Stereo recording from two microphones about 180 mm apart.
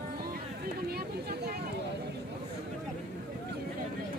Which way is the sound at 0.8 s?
60° right (ahead or behind).